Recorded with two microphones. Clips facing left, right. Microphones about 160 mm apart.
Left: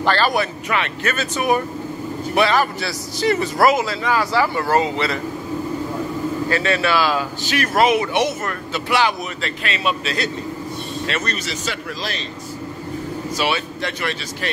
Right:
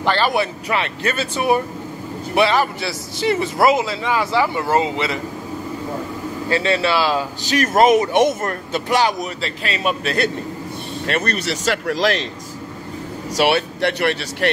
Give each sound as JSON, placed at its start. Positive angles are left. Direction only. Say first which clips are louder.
{"t": 0.0, "sound": "speech", "louder": "even", "side_deg": -20}
{"t": 6.5, "sound": "speech", "louder": "right 2 dB", "side_deg": -25}
{"t": 7.5, "sound": "speech", "louder": "right 3 dB", "side_deg": -45}
{"t": 9.8, "sound": "a man's voice", "louder": "right 3 dB", "side_deg": -55}
{"t": 13.4, "sound": "speech", "louder": "right 7 dB", "side_deg": -70}